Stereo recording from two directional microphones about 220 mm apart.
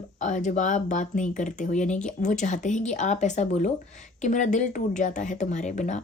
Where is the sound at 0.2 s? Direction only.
35° left (ahead or behind).